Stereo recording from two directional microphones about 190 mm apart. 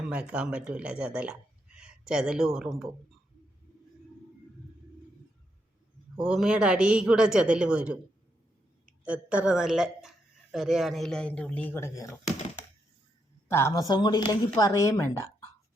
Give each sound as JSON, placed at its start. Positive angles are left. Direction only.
{"t": 0.1, "sound": "speech", "side_deg": -5}
{"t": 6.1, "sound": "speech", "side_deg": 0}
{"t": 9.0, "sound": "speech", "side_deg": -5}
{"t": 13.5, "sound": "speech", "side_deg": 15}